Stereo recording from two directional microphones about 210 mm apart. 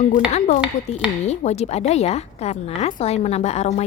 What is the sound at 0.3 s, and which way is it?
A woman's voice, 35° left (ahead or behind).